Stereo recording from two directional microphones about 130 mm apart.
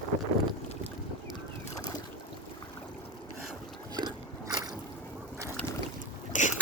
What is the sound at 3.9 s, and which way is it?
Biting, 30° right (ahead or behind).